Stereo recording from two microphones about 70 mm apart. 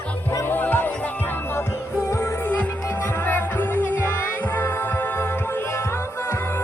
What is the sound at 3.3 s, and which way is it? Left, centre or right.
Music, left.